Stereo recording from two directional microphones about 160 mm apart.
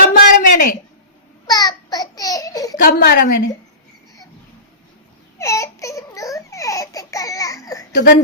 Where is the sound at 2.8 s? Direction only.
70° left (ahead or behind).